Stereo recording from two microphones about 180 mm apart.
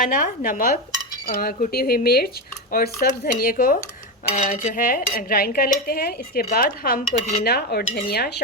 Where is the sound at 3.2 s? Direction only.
50° left (ahead or behind).